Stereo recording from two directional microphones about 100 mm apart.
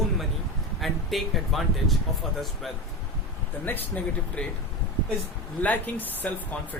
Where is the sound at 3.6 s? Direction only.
15° left (ahead or behind).